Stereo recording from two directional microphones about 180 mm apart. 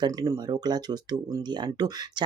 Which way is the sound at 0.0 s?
20° right (ahead or behind).